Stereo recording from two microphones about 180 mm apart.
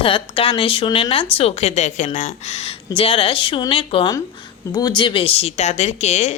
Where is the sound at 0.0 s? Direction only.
30° left (ahead or behind).